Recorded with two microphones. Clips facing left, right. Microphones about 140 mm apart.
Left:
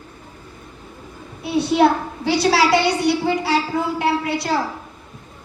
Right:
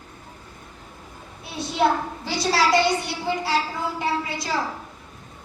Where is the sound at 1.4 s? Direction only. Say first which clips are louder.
Left 10 dB; 65° left (ahead or behind).